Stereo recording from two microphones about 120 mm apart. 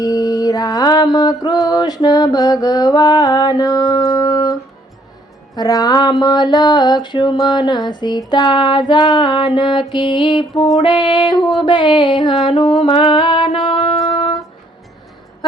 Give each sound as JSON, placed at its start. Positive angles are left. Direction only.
{"t": 0.0, "sound": "mantra", "side_deg": 30}
{"t": 5.5, "sound": "mantra", "side_deg": 30}
{"t": 12.3, "sound": "mantra", "side_deg": 0}
{"t": 12.5, "sound": "music", "side_deg": 50}